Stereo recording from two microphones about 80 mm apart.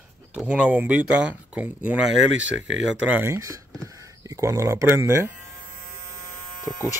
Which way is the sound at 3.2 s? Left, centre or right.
Right.